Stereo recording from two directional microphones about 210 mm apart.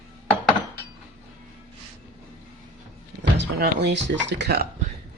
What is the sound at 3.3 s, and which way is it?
Speech, 55° right (ahead or behind).